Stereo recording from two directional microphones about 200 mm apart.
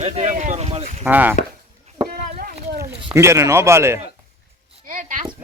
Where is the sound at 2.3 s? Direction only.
45° right (ahead or behind).